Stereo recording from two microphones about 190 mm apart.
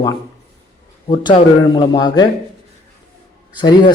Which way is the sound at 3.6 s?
25° left (ahead or behind).